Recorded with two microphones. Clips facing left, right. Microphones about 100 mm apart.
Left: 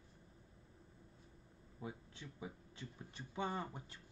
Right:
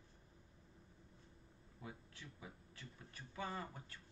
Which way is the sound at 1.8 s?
20° left (ahead or behind).